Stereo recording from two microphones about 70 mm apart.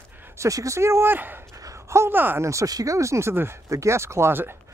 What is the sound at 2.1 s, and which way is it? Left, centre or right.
Speech, right.